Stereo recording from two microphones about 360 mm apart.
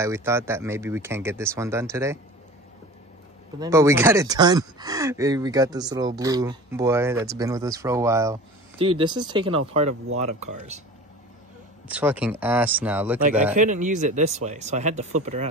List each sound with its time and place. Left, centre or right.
0.0 s speech: centre
3.5 s speech: centre
11.9 s speech: centre
13.6 s speech: centre